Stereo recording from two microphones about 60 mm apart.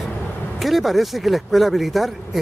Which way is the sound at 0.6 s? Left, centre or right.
Centre.